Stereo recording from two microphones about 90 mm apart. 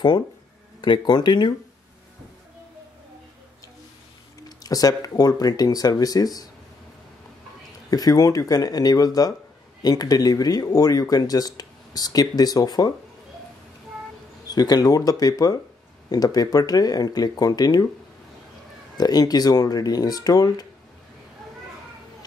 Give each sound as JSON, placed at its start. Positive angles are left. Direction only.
{"t": 0.7, "sound": "speech", "side_deg": 60}
{"t": 4.5, "sound": "speech", "side_deg": 45}
{"t": 7.9, "sound": "speech", "side_deg": 45}
{"t": 14.4, "sound": "speech", "side_deg": 45}
{"t": 18.9, "sound": "speech", "side_deg": 45}